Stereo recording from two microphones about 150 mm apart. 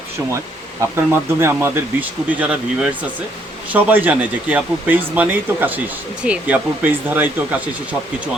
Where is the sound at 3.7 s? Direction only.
10° right (ahead or behind).